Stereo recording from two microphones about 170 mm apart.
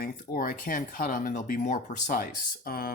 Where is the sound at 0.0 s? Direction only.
60° left (ahead or behind).